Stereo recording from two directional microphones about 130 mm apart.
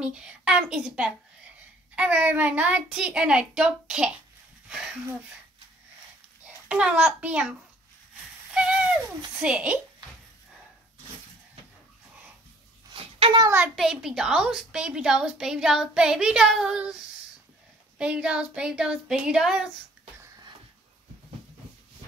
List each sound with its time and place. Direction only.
0.0 s a woman's voice: 10° right (ahead or behind)
6.4 s a child's voice: 10° right (ahead or behind)
8.5 s owl: 10° right (ahead or behind)
9.4 s speech: 10° right (ahead or behind)
12.9 s a sound: 45° right (ahead or behind)
13.5 s a woman's voice: 5° right (ahead or behind)
17.9 s speech: 5° right (ahead or behind)